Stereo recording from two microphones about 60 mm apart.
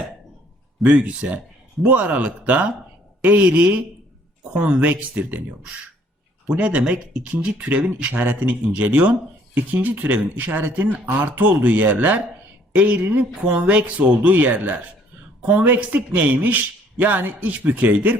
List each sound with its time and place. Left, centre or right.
0.8 s speech: right